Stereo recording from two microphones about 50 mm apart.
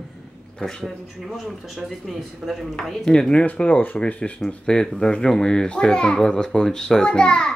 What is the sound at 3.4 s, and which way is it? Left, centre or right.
Speech, left.